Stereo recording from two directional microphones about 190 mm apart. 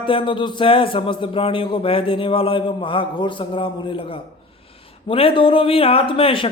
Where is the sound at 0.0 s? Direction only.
25° left (ahead or behind).